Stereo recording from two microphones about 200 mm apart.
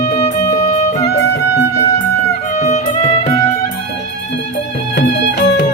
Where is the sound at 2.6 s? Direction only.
35° left (ahead or behind).